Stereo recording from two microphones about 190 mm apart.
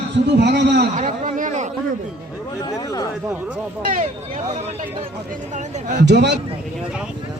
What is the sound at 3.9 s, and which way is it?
Speech, 45° right (ahead or behind).